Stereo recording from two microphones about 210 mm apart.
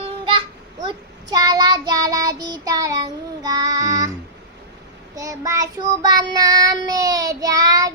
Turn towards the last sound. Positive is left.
turn(degrees=-15)  # may be behind; listen again after turning